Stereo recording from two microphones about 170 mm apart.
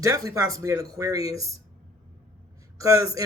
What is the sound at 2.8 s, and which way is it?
Speech, 20° right (ahead or behind).